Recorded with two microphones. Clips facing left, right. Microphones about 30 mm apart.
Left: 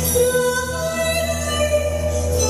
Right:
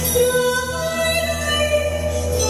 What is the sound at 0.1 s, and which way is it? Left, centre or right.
Music, centre.